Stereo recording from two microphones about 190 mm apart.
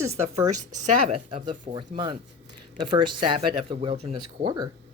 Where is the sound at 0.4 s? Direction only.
35° right (ahead or behind).